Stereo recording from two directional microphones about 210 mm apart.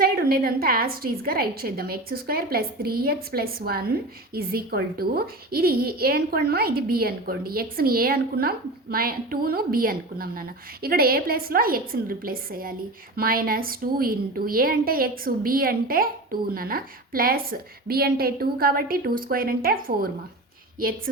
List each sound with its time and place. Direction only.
0.0 s a woman's voice: 45° right (ahead or behind)